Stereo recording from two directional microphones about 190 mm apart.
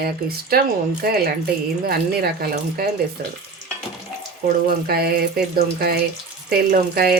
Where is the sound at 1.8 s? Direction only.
55° right (ahead or behind).